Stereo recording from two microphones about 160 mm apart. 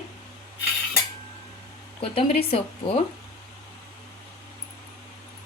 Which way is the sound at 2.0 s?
35° left (ahead or behind).